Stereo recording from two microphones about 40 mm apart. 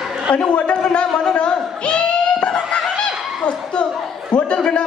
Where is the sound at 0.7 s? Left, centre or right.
Left.